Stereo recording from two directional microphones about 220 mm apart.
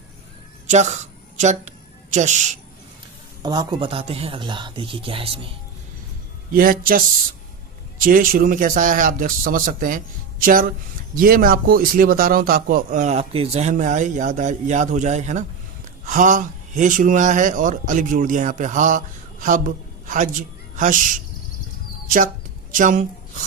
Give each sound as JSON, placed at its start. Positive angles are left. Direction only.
{"t": 0.7, "sound": "speech", "side_deg": -30}
{"t": 3.4, "sound": "speech", "side_deg": -20}
{"t": 6.5, "sound": "speech", "side_deg": -40}
{"t": 22.7, "sound": "speech", "side_deg": -35}